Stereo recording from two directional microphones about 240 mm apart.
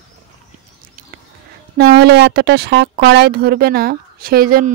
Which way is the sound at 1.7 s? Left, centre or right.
Right.